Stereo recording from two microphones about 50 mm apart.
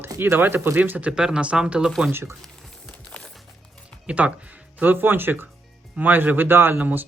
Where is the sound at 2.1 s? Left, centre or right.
Right.